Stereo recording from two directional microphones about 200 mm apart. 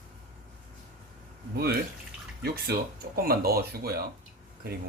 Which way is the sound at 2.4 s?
55° right (ahead or behind).